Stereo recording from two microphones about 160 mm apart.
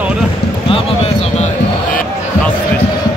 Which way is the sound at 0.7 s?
35° left (ahead or behind).